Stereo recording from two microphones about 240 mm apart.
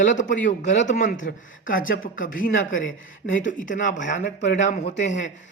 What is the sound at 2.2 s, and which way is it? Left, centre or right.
Speech, left.